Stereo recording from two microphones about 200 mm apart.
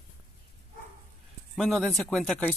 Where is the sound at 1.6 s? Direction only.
Centre (ahead or behind).